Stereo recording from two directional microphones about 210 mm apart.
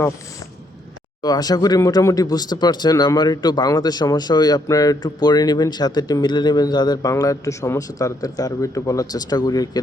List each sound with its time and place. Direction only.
1.2 s speech: 20° left (ahead or behind)